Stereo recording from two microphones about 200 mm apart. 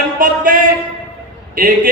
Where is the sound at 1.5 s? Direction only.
45° right (ahead or behind).